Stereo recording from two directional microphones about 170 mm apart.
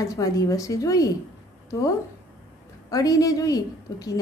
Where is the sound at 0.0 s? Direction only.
20° left (ahead or behind).